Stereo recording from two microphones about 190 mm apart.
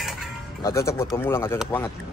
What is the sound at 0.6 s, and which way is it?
Speech, 15° left (ahead or behind).